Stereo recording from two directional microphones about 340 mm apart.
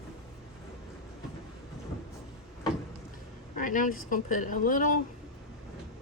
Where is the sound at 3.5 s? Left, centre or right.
Left.